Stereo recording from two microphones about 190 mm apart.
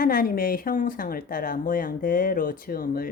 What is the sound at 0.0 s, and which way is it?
Speech, 50° left (ahead or behind).